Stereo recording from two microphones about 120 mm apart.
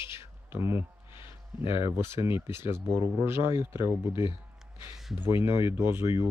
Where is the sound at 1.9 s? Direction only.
20° right (ahead or behind).